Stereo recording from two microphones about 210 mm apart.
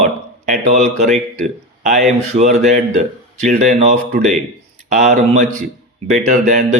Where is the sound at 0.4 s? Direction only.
35° right (ahead or behind).